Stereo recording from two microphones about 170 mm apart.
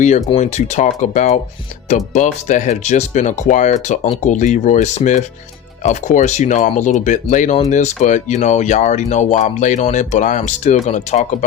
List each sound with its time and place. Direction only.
0.3 s speech: 40° left (ahead or behind)